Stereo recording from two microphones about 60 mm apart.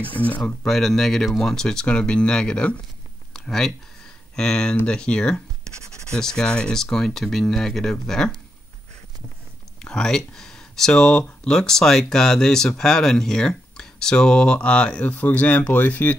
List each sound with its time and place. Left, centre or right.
0.0 s speech: left
0.7 s speech: centre
9.8 s speech: centre